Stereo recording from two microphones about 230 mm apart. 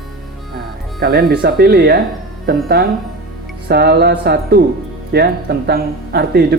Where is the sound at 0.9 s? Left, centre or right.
Right.